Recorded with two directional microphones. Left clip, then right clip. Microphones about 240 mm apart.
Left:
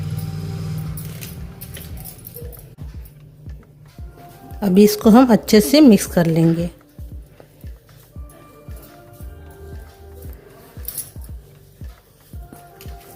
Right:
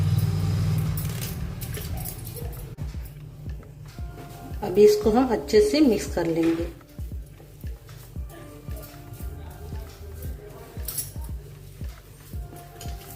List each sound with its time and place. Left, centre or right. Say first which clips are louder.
4.6 s a woman's voice: left 3 dB; left